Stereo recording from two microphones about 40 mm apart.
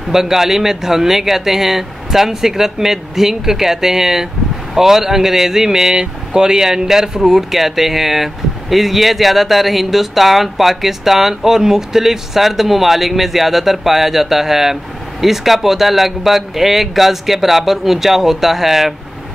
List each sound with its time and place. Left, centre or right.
0.0 s speech: centre